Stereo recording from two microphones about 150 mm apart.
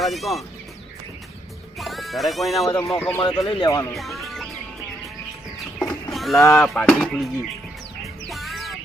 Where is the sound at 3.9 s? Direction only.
Centre (ahead or behind).